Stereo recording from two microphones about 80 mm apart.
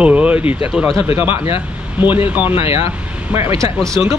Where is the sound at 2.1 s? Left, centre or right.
Right.